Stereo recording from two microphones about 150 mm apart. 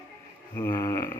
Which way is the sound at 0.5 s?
15° left (ahead or behind).